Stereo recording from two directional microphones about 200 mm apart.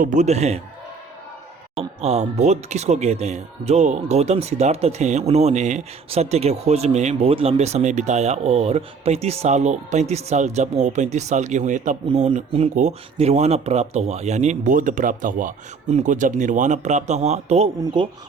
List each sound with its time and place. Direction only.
0.0 s speech: 35° right (ahead or behind)
2.0 s speech: 30° right (ahead or behind)